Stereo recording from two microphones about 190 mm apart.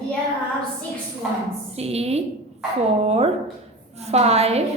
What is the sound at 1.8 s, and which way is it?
Speech, 35° right (ahead or behind).